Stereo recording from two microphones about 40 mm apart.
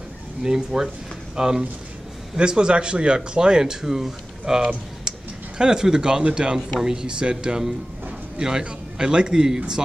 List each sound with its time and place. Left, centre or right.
0.4 s speech: centre